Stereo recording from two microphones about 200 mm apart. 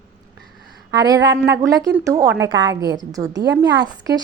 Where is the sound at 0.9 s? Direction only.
20° right (ahead or behind).